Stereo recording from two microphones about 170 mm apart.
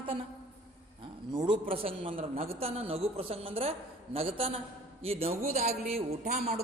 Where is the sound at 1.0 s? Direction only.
30° right (ahead or behind).